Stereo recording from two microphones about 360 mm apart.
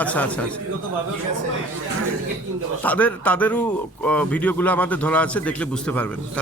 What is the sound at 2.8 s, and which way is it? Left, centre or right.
A man's voice, centre.